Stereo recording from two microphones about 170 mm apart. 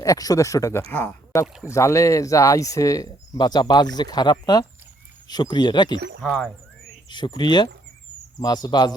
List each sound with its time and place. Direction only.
0.0 s speech: 20° left (ahead or behind)
6.2 s speech: 5° left (ahead or behind)
7.1 s speech: 25° left (ahead or behind)